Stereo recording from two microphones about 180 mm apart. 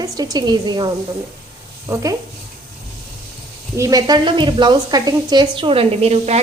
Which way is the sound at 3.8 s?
20° right (ahead or behind).